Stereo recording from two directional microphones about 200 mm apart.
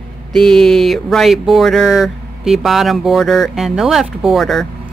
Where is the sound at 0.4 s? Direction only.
Centre (ahead or behind).